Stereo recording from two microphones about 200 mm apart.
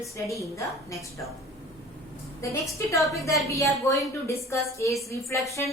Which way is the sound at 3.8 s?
15° left (ahead or behind).